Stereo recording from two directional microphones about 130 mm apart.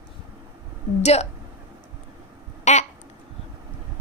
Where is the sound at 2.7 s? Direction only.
65° left (ahead or behind).